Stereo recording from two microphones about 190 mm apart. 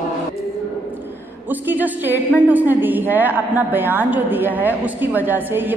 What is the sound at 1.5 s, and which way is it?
A woman's voice, 10° right (ahead or behind).